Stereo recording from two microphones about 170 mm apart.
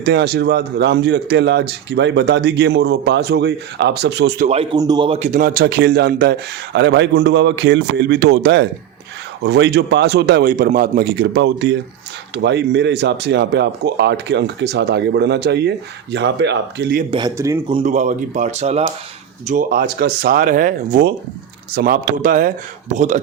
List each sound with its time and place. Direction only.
0.0 s speech: 80° right
4.7 s a man's voice: 25° right (ahead or behind)
5.3 s a man's voice: 60° right (ahead or behind)
6.7 s a man's voice: 90° right
16.1 s a man's voice: 90° right
17.1 s a man's voice: 25° right (ahead or behind)
17.3 s speech: 15° right (ahead or behind)
17.8 s speech: 45° right (ahead or behind)
19.5 s speech: 55° right (ahead or behind)